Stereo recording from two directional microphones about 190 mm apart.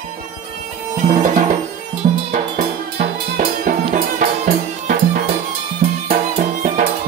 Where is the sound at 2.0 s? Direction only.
35° right (ahead or behind).